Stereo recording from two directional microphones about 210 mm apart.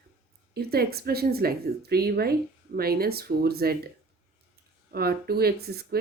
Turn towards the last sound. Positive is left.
turn(degrees=-50)  # may be behind; listen again after turning